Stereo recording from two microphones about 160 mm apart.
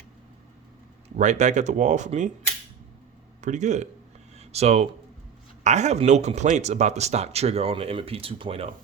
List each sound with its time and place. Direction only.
1.1 s speech: 50° right (ahead or behind)
3.4 s speech: 50° right (ahead or behind)